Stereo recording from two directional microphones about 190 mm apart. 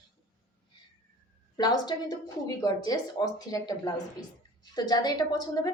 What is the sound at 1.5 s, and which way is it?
A woman's voice, 20° left (ahead or behind).